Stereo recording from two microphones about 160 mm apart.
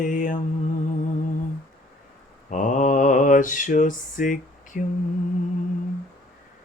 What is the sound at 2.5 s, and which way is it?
Mantra, 50° left (ahead or behind).